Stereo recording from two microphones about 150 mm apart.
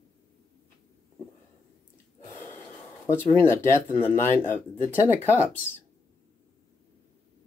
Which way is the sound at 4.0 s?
15° left (ahead or behind).